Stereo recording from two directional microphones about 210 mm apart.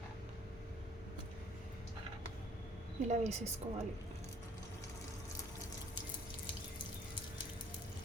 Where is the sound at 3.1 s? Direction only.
30° right (ahead or behind).